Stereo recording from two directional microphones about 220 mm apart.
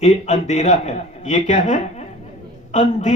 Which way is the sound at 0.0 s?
30° left (ahead or behind).